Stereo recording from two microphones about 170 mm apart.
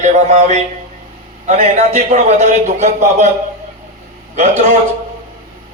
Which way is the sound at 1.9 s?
40° right (ahead or behind).